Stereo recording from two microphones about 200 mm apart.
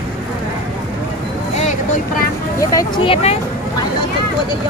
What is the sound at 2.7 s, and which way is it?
Vehicle, 15° left (ahead or behind).